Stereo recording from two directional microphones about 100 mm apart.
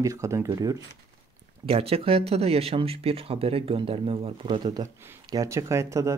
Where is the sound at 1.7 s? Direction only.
75° right (ahead or behind).